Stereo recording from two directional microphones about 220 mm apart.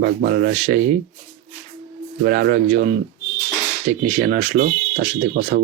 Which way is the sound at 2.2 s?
45° right (ahead or behind).